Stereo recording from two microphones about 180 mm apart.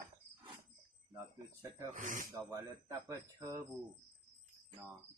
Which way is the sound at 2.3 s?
15° right (ahead or behind).